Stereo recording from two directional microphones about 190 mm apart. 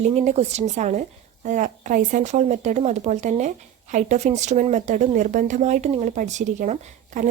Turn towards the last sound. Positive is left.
turn(degrees=-40)  # may be behind; listen again after turning